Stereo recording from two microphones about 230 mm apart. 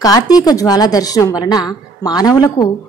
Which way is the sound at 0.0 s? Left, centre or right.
Centre.